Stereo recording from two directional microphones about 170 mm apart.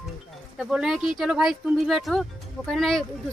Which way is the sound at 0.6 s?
5° right (ahead or behind).